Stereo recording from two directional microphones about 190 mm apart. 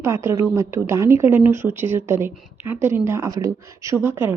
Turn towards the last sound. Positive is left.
turn(degrees=-10)  # may be behind; listen again after turning